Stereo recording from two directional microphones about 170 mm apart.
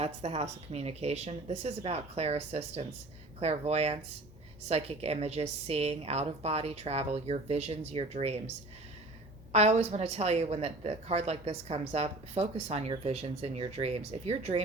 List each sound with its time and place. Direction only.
0.0 s speech: 35° right (ahead or behind)
9.5 s speech: 40° right (ahead or behind)